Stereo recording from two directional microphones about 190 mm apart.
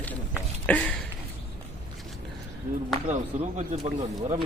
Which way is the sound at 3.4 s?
35° right (ahead or behind).